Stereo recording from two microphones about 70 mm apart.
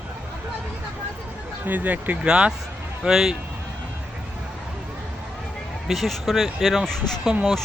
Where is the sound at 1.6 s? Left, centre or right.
Right; by 3.3 s centre.